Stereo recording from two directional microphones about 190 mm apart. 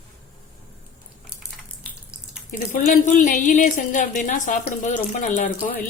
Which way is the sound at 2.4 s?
45° left (ahead or behind).